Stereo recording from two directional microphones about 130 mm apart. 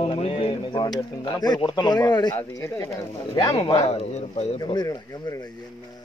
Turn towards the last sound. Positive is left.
turn(degrees=25)  # may be behind; listen again after turning